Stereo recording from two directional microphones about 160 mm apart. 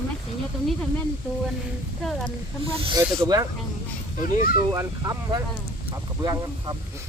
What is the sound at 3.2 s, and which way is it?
Speech, 25° right (ahead or behind).